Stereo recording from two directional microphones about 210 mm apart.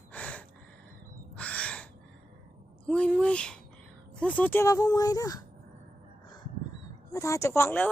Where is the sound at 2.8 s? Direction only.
5° left (ahead or behind).